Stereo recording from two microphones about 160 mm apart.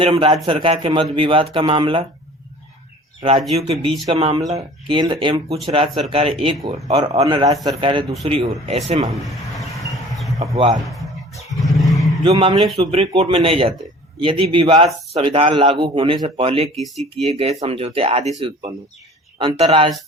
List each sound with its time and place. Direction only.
0.0 s speech: 35° right (ahead or behind)
3.2 s speech: 35° right (ahead or behind)
7.3 s speech: 30° right (ahead or behind)
9.2 s vehicle: centre (ahead or behind)
10.3 s speech: 20° right (ahead or behind)
10.8 s a sound: centre (ahead or behind)
12.2 s speech: 30° right (ahead or behind)
16.7 s speech: centre (ahead or behind)
17.2 s speech: 40° right (ahead or behind)